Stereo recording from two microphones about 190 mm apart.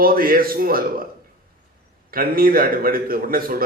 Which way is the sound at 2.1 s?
50° right (ahead or behind).